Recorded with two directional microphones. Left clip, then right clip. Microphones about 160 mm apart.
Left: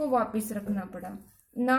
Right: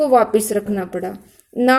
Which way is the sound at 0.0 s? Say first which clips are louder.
Right 14 dB; 30° right (ahead or behind).